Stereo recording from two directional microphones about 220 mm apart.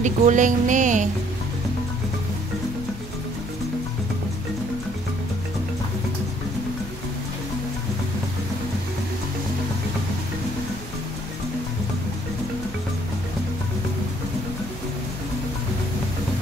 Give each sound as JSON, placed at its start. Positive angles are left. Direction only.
{"t": 0.0, "sound": "speech", "side_deg": -35}